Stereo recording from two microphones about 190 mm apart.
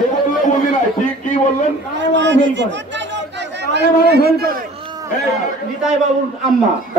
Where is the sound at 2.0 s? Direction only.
70° right (ahead or behind).